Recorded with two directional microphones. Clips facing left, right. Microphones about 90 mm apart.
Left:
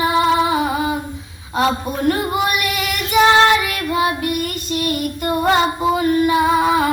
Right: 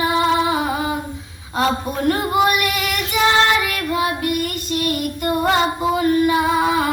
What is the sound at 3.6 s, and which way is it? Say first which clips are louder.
Child singing: left 2 dB; 20° left (ahead or behind).